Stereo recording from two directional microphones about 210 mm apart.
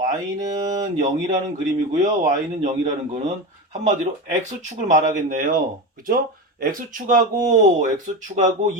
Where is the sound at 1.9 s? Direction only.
35° right (ahead or behind).